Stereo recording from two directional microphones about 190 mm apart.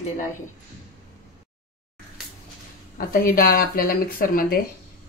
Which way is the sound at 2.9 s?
50° left (ahead or behind).